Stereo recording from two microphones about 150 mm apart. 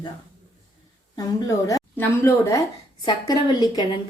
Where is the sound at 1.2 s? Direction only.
20° left (ahead or behind).